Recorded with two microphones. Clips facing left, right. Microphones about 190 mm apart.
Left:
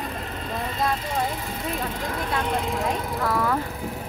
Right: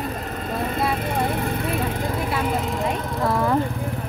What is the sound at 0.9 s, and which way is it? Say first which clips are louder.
Speech: right 3 dB; 60° right (ahead or behind).